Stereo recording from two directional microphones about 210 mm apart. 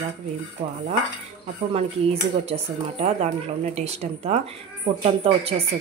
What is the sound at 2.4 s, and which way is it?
A woman's voice, 30° right (ahead or behind).